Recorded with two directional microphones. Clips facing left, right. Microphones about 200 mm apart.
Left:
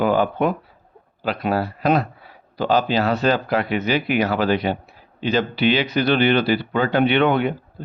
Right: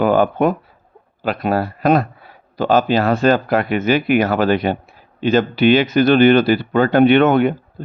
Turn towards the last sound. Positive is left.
turn(degrees=-45)  # may be behind; listen again after turning